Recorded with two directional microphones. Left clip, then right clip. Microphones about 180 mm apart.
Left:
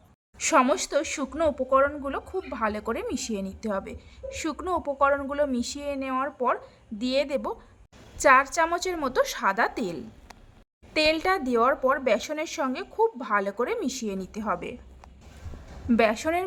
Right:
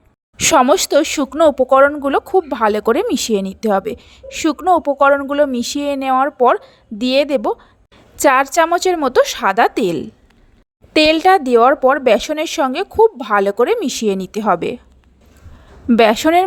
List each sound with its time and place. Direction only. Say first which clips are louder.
0.3 s a woman's voice: right 10 dB; 50° right (ahead or behind)
15.9 s a woman's voice: right 12 dB; 45° right (ahead or behind)